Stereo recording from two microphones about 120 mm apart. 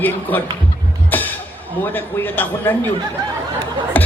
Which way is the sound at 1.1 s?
15° left (ahead or behind).